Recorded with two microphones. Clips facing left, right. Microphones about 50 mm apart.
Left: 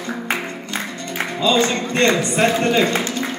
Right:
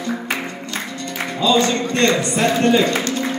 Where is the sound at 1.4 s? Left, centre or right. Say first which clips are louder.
Right 1 dB; left.